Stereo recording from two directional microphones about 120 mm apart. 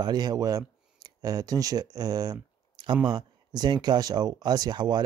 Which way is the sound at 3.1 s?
35° right (ahead or behind).